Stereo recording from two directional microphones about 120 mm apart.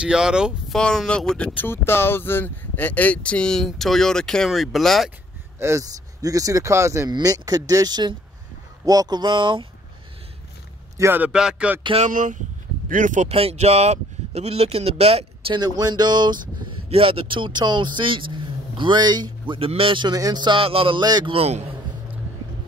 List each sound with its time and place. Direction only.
0.0 s speech: 5° right (ahead or behind)
0.7 s speech: 5° left (ahead or behind)
5.6 s speech: 25° right (ahead or behind)
7.1 s speech: 35° right (ahead or behind)
11.0 s speech: 15° right (ahead or behind)
12.0 s speech: 90° right
13.4 s speech: 60° right (ahead or behind)
15.5 s speech: 35° right (ahead or behind)
16.9 s speech: 50° right (ahead or behind)
21.0 s speech: 35° right (ahead or behind)
21.3 s speech: 60° right (ahead or behind)